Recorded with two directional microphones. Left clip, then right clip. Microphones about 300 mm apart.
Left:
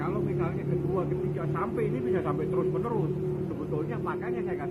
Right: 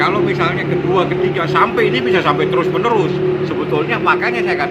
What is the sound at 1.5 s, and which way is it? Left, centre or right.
Speech, centre.